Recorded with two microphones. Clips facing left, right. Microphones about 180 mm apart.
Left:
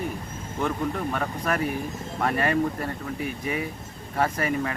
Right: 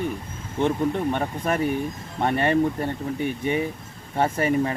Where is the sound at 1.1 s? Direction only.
30° right (ahead or behind).